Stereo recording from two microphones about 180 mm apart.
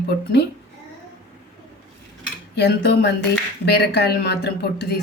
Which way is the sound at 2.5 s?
70° left (ahead or behind).